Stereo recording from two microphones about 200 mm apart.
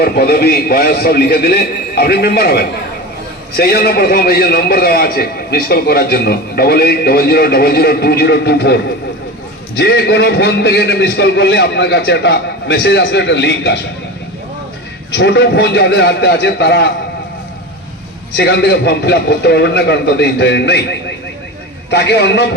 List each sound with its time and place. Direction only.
0.0 s a man's voice: 50° left (ahead or behind)
15.1 s a man's voice: 60° left (ahead or behind)
18.3 s a man's voice: 55° left (ahead or behind)
21.8 s a man's voice: 55° left (ahead or behind)